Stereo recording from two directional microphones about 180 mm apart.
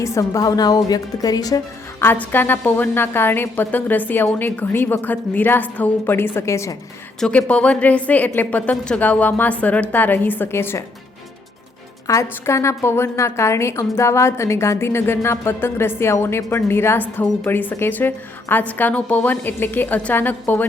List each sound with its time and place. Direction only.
0.0 s a woman's voice: 20° left (ahead or behind)
12.0 s a woman's voice: 15° left (ahead or behind)